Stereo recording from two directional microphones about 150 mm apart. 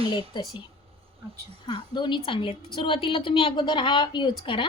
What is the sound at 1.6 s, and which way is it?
Speech, 30° left (ahead or behind).